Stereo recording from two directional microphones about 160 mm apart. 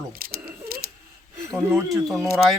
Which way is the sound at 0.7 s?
65° right (ahead or behind).